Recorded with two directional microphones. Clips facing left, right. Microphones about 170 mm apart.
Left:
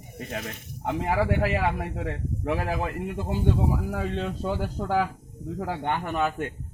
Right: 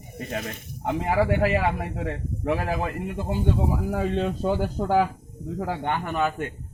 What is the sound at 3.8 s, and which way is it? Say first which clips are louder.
Speech: right 4 dB; 20° right (ahead or behind).